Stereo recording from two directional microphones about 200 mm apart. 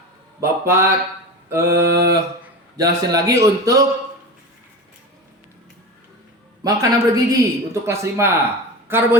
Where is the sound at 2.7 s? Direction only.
15° right (ahead or behind).